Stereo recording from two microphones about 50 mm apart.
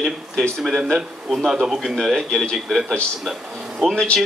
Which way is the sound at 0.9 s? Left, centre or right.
Centre.